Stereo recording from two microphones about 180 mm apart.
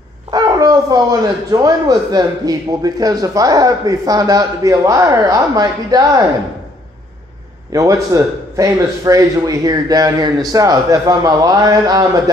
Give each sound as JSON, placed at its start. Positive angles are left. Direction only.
{"t": 0.3, "sound": "a sound", "side_deg": -20}
{"t": 1.5, "sound": "a man's voice", "side_deg": -20}
{"t": 7.7, "sound": "a man's voice", "side_deg": -20}